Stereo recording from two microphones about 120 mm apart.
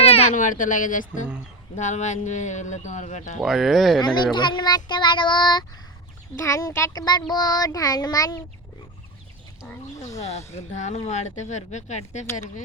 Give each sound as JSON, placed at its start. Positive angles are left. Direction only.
{"t": 0.0, "sound": "speech", "side_deg": 55}
{"t": 3.4, "sound": "speech", "side_deg": 0}
{"t": 4.0, "sound": "a child's voice", "side_deg": 40}
{"t": 6.4, "sound": "a child's voice", "side_deg": 25}
{"t": 10.5, "sound": "speech", "side_deg": 80}